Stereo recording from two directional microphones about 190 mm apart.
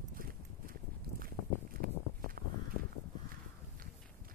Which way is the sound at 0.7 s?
50° right (ahead or behind).